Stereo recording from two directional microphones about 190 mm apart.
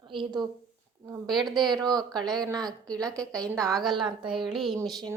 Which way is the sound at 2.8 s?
20° right (ahead or behind).